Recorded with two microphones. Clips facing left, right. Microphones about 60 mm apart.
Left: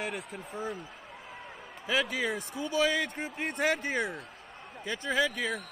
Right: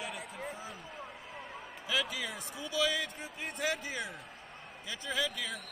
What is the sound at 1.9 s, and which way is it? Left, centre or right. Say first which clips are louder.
A man's voice: left 6 dB; left.